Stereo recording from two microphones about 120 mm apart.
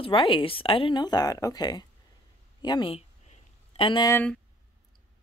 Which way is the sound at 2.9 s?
50° left (ahead or behind).